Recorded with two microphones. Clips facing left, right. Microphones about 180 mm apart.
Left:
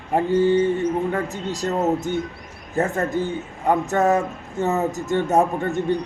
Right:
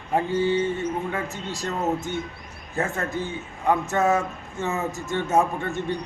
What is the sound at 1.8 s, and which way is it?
Speech, 15° left (ahead or behind).